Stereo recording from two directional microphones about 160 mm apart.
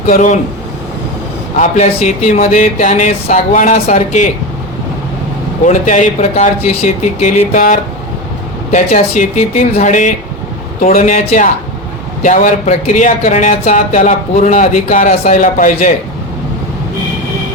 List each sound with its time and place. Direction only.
0.1 s speech: 50° left (ahead or behind)
1.5 s speech: 50° left (ahead or behind)
5.6 s speech: 50° left (ahead or behind)